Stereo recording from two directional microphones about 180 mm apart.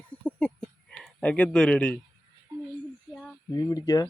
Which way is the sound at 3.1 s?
Centre (ahead or behind).